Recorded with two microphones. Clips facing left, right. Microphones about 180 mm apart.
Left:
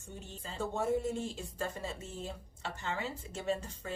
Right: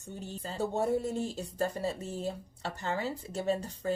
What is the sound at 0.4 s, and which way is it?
Speech, 35° right (ahead or behind).